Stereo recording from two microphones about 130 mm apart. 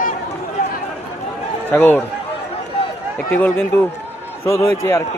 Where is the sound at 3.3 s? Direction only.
10° left (ahead or behind).